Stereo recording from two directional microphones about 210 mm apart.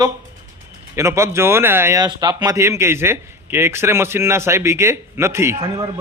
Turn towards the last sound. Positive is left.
turn(degrees=-15)  # may be behind; listen again after turning